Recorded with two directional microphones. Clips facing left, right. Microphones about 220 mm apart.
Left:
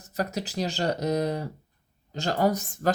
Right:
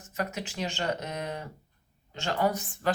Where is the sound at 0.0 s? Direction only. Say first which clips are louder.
Left 4 dB; 35° left (ahead or behind).